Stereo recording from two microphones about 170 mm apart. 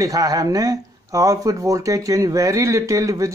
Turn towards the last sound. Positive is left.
turn(degrees=-20)  # may be behind; listen again after turning